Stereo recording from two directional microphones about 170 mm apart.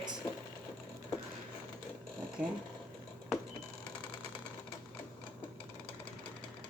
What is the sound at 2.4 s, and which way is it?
Speech, 5° right (ahead or behind).